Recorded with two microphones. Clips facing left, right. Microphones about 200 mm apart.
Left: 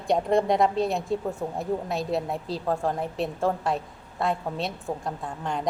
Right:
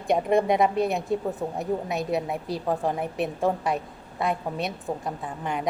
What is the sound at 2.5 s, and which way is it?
A woman's voice, 15° right (ahead or behind).